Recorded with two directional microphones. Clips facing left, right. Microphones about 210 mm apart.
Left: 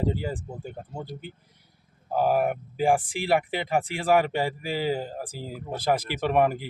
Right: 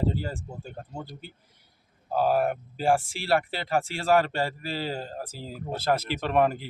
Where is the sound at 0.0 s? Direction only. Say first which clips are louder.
Left 1 dB; 15° left (ahead or behind).